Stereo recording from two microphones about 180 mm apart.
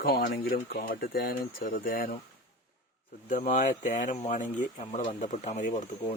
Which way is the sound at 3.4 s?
45° left (ahead or behind).